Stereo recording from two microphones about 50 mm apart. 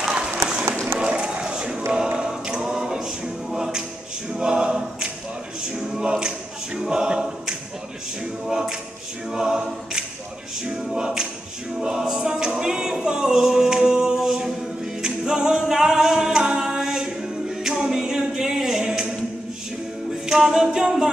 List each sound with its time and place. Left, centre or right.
0.9 s a sound: centre
2.0 s a capella: centre
6.8 s choir: centre
8.5 s a capella: centre
20.2 s a capella: centre